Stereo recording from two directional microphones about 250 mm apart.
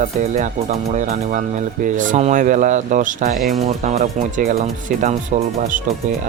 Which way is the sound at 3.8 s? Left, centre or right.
Right.